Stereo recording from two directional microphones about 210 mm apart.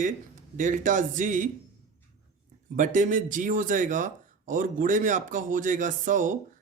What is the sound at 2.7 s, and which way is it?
Speech, 40° right (ahead or behind).